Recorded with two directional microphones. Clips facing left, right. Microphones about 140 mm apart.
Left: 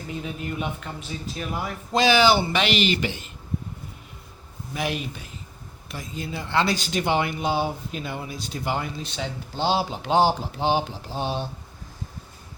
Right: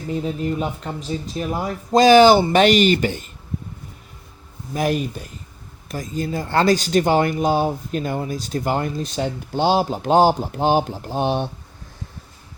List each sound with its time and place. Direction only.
0.2 s speech: 35° right (ahead or behind)
4.7 s speech: 45° right (ahead or behind); by 11.4 s 60° right (ahead or behind)